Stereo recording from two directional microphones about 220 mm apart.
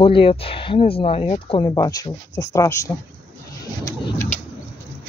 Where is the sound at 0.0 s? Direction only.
25° left (ahead or behind).